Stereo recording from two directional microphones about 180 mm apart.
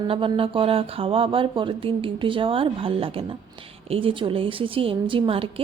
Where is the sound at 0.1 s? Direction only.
30° right (ahead or behind).